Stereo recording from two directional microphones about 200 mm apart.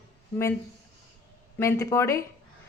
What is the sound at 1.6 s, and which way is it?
Speech, 15° left (ahead or behind).